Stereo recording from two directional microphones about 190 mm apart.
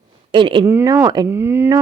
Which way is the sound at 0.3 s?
25° right (ahead or behind).